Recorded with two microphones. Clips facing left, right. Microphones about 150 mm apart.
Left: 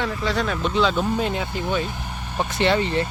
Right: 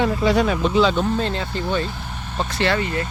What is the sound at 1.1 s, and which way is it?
Speech, 10° left (ahead or behind).